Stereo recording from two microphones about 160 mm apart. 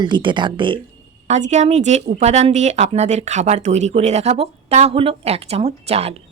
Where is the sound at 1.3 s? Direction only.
45° right (ahead or behind).